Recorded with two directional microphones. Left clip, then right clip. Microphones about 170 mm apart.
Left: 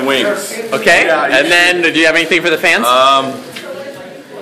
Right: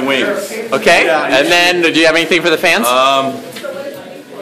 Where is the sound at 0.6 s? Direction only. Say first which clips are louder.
Even; 15° right (ahead or behind).